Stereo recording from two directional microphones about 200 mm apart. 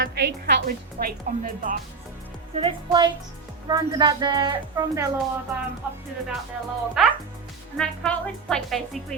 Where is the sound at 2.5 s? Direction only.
25° right (ahead or behind).